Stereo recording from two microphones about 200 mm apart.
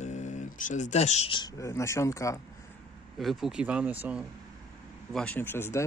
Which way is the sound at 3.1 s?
Centre (ahead or behind).